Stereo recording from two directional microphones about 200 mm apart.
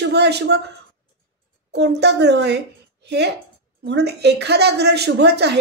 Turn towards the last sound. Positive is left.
turn(degrees=-55)  # may be behind; listen again after turning